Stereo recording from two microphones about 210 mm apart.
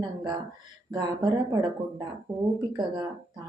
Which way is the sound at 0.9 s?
15° right (ahead or behind).